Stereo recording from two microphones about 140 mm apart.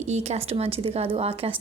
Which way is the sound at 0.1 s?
50° right (ahead or behind).